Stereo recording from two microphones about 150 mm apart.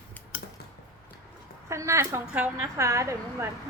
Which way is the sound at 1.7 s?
20° right (ahead or behind).